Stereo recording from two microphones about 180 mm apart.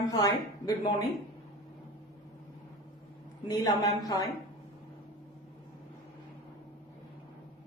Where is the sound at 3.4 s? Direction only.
20° left (ahead or behind).